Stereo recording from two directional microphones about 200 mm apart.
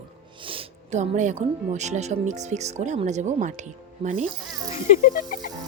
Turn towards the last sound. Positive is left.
turn(degrees=40)  # may be behind; listen again after turning